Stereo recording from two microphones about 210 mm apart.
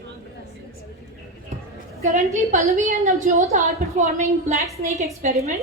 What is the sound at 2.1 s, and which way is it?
A woman's voice, 35° right (ahead or behind).